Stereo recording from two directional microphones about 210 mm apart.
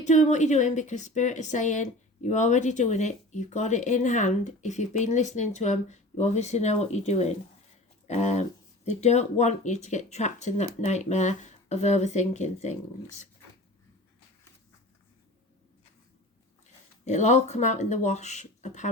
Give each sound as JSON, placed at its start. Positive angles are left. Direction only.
{"t": 0.0, "sound": "a woman's voice", "side_deg": 35}
{"t": 17.1, "sound": "a woman's voice", "side_deg": 35}